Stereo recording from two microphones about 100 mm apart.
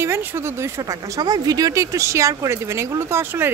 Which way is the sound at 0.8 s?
35° right (ahead or behind).